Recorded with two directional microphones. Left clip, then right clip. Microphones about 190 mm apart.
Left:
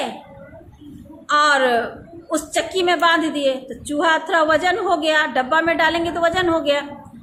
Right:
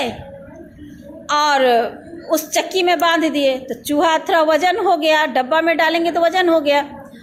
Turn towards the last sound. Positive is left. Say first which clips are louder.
# right 4 dB
turn(degrees=-25)  # may be behind; listen again after turning